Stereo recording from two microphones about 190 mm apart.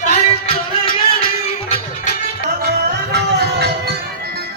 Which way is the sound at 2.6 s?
60° right (ahead or behind).